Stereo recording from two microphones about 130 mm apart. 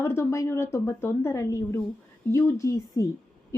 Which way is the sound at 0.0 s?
20° left (ahead or behind).